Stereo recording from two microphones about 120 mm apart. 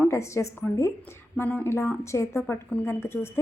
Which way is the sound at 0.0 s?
25° left (ahead or behind).